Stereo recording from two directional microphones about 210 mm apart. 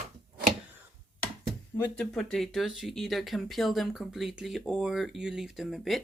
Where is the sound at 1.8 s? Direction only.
5° left (ahead or behind).